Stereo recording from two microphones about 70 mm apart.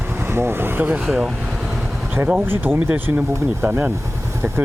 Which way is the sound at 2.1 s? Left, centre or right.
Right.